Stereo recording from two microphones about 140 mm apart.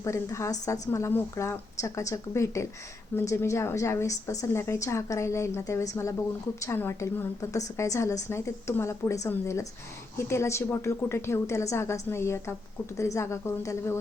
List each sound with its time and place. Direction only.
0.0 s a woman's voice: 20° left (ahead or behind)